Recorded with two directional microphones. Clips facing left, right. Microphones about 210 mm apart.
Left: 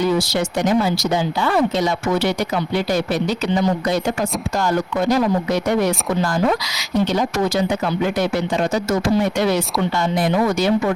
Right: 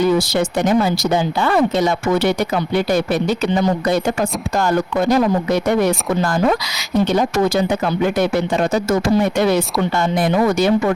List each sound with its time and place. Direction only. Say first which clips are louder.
0.2 s speech: right 2 dB; 50° right (ahead or behind)